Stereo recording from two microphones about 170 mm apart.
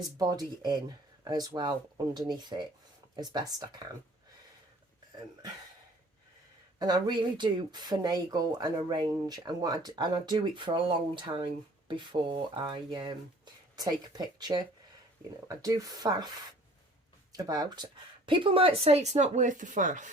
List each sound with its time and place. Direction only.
0.2 s speech: 20° right (ahead or behind)
6.7 s speech: 25° right (ahead or behind)
17.3 s speech: 20° right (ahead or behind); by 20.1 s 50° right (ahead or behind)